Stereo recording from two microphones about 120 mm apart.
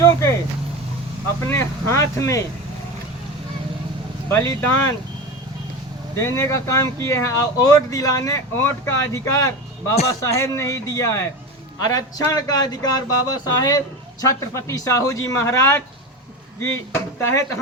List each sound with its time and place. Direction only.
1.5 s speech: 20° left (ahead or behind)
4.3 s speech: 20° left (ahead or behind)
6.1 s speech: 25° left (ahead or behind)